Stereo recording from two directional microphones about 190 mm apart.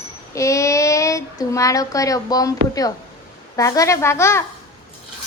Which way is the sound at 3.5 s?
15° left (ahead or behind).